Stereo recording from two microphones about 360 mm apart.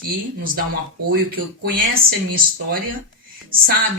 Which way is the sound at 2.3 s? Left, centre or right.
Right.